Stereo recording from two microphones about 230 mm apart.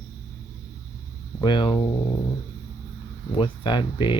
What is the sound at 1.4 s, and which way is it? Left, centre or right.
Speech, centre.